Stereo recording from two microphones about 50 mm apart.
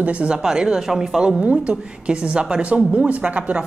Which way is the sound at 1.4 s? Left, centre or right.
Right.